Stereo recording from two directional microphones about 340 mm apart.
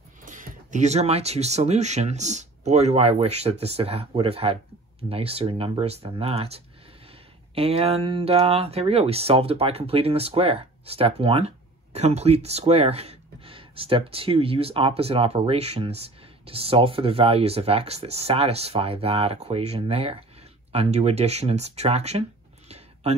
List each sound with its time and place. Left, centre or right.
0.2 s speech: right